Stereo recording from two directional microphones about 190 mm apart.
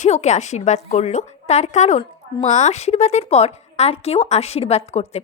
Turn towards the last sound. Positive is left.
turn(degrees=35)  # may be behind; listen again after turning